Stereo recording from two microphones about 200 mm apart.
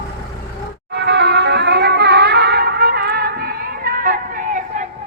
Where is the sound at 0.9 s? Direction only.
55° right (ahead or behind); by 4.8 s 40° right (ahead or behind).